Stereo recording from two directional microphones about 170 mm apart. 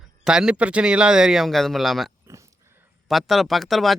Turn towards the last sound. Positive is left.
turn(degrees=0)  # may be behind; listen again after turning